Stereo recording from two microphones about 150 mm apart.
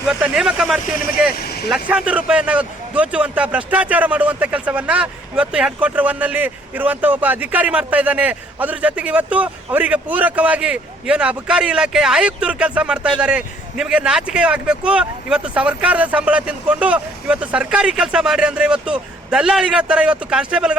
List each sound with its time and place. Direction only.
0.1 s speech: 5° right (ahead or behind)
1.4 s speech: 90° left
1.7 s speech: 5° right (ahead or behind)